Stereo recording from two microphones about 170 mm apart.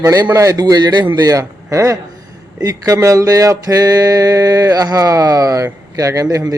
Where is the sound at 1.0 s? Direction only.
20° right (ahead or behind).